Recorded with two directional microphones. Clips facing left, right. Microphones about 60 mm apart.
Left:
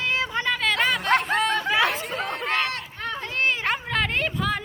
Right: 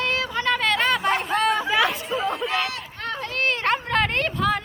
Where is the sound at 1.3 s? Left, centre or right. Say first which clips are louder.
Right 1 dB; centre.